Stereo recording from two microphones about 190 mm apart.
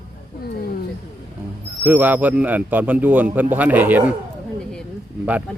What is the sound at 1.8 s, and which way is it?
A man's voice, 10° right (ahead or behind).